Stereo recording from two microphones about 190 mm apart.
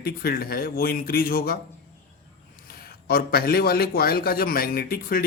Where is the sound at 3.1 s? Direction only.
55° left (ahead or behind).